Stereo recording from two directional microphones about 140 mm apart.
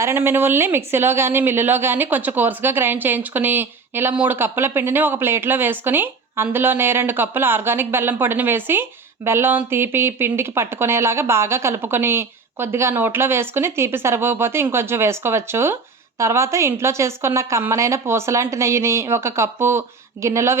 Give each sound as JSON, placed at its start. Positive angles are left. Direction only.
{"t": 0.0, "sound": "speech", "side_deg": -15}